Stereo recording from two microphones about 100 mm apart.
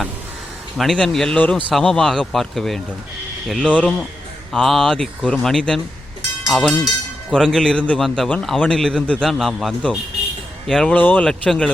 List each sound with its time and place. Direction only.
0.8 s speech: 5° left (ahead or behind)
1.4 s a man's voice: 15° left (ahead or behind)
1.7 s a man's voice: 5° left (ahead or behind)